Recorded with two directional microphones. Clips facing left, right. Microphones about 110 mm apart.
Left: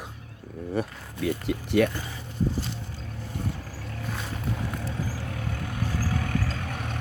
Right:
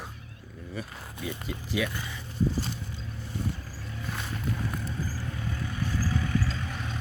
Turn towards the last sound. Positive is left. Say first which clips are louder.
# left 2 dB
turn(degrees=60)  # may be behind; listen again after turning